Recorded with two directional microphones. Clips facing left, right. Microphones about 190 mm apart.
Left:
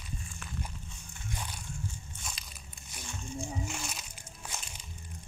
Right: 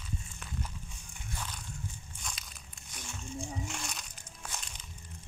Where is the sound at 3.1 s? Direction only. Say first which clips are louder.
Left 2 dB; centre (ahead or behind).